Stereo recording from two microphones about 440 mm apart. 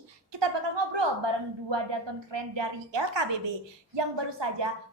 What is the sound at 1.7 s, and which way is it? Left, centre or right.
A woman's voice, right.